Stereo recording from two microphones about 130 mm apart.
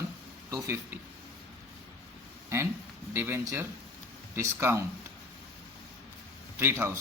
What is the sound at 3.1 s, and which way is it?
A man's voice, 20° right (ahead or behind).